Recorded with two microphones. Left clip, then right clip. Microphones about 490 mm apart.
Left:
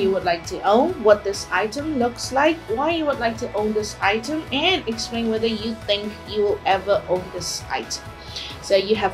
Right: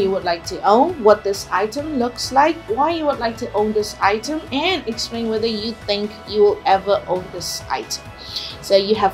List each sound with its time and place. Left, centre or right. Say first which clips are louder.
0.0 s a woman's voice: right 1 dB; right